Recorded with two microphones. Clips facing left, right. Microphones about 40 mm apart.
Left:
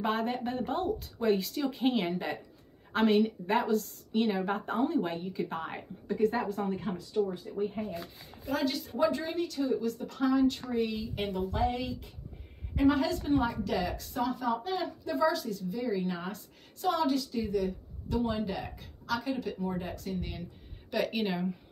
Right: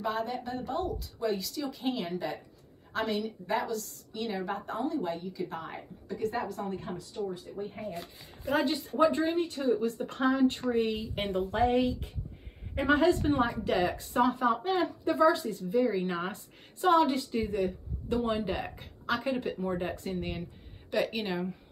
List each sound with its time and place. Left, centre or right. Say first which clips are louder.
0.0 s a woman's voice: left 2 dB; left
6.9 s speech: left 4 dB; left
8.5 s a woman's voice: right 3 dB; right
20.9 s speech: even; centre